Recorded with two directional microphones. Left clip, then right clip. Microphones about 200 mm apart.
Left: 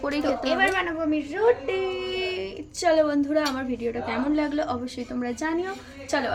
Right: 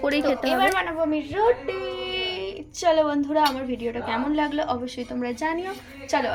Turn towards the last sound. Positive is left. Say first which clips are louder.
# right 2 dB
turn(degrees=15)  # may be behind; listen again after turning